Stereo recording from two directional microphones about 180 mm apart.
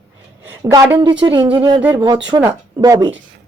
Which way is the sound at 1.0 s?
25° right (ahead or behind).